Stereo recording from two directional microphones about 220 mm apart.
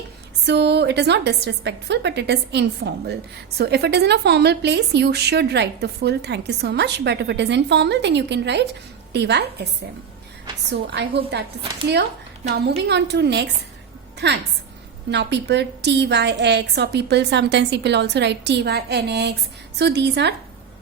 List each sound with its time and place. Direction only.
0.4 s a woman's voice: 50° right (ahead or behind)
11.2 s a woman's voice: 45° right (ahead or behind)
12.5 s a woman's voice: 45° right (ahead or behind)
15.1 s a woman's voice: 50° right (ahead or behind)